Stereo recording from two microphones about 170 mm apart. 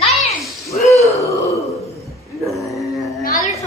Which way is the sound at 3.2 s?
55° left (ahead or behind).